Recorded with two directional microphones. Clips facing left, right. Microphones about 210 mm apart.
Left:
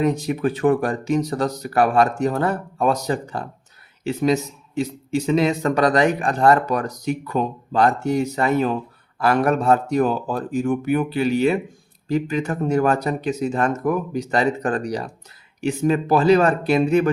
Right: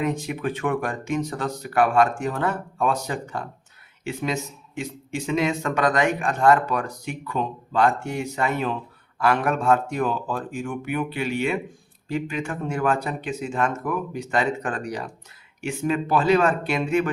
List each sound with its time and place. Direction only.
0.0 s speech: 35° left (ahead or behind)